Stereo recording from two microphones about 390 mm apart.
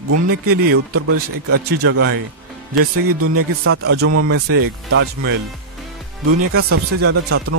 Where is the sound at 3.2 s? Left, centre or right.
Right.